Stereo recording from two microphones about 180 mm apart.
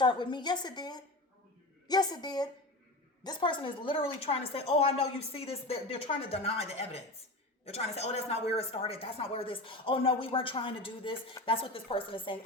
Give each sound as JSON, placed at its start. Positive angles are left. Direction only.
{"t": 0.0, "sound": "a woman's voice", "side_deg": 25}